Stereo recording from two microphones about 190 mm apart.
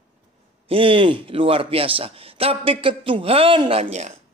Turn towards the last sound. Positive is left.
turn(degrees=-35)  # may be behind; listen again after turning